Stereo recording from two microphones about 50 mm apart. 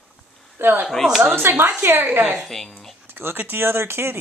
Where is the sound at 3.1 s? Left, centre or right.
Right.